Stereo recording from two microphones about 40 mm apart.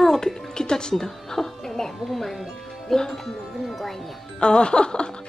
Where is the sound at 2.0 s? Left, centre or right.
Centre.